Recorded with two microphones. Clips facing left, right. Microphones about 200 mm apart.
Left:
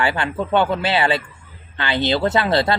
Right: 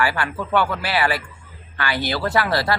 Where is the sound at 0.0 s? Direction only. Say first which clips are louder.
Left 2 dB; 20° left (ahead or behind).